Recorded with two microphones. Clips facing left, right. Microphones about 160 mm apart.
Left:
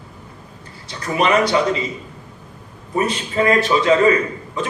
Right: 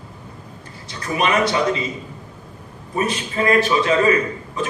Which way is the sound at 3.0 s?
30° left (ahead or behind).